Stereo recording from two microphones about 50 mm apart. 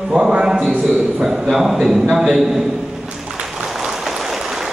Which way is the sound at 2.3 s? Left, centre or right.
Centre.